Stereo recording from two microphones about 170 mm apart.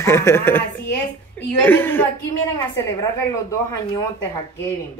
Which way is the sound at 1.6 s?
10° left (ahead or behind).